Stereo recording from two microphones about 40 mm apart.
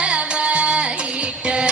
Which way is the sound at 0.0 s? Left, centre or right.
Right.